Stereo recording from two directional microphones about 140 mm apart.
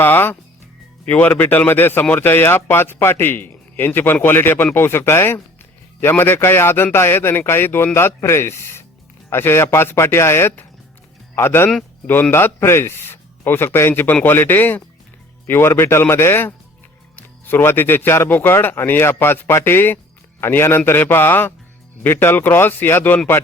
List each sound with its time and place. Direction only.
0.0 s speech: 15° left (ahead or behind)